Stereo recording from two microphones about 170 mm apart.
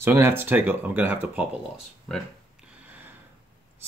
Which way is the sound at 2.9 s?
10° right (ahead or behind).